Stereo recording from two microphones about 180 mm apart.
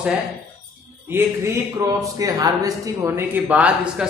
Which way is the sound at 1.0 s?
15° right (ahead or behind).